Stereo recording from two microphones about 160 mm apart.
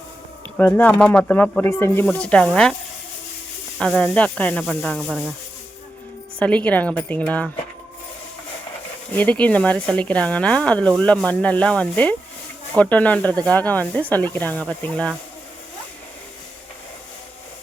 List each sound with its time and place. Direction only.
0.5 s speech: 10° left (ahead or behind)
3.8 s speech: 5° left (ahead or behind)
6.4 s speech: 10° left (ahead or behind)
9.1 s speech: 10° left (ahead or behind)